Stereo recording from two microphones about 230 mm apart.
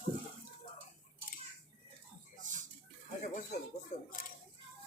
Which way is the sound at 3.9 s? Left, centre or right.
Left.